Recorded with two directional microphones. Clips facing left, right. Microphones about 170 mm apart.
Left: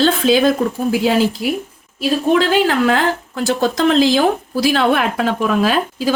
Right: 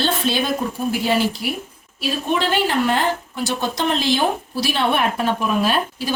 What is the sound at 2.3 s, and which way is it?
Speech, 90° left.